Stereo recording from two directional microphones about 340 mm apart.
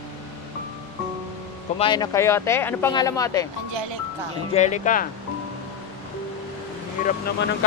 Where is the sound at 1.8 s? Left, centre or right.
Centre.